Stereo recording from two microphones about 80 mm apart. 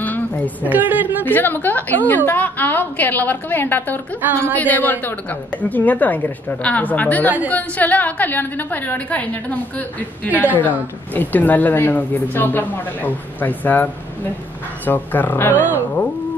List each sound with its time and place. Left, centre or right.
0.0 s a sound: left
0.6 s a woman's voice: right
1.2 s a woman's voice: left
4.2 s a woman's voice: right
4.6 s a woman's voice: left
14.9 s a woman's voice: left
15.5 s a woman's voice: right